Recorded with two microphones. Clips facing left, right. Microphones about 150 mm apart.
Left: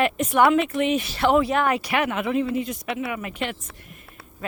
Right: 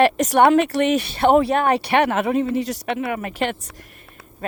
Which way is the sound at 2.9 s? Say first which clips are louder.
Right 4 dB; 45° right (ahead or behind).